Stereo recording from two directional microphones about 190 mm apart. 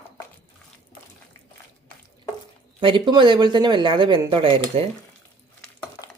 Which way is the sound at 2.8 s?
25° right (ahead or behind).